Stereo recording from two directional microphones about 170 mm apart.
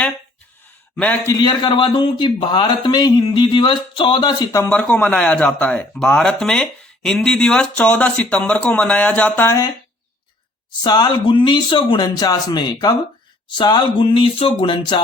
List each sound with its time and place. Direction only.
0.9 s speech: 10° left (ahead or behind)
1.3 s a man's voice: 25° left (ahead or behind)
4.7 s speech: 10° left (ahead or behind)
10.8 s a man's voice: 25° left (ahead or behind)